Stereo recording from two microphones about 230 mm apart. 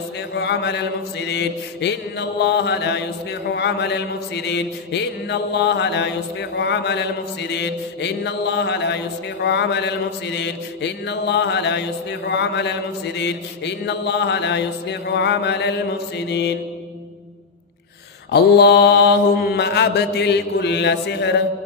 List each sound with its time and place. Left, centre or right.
0.3 s mantra: left
18.3 s mantra: left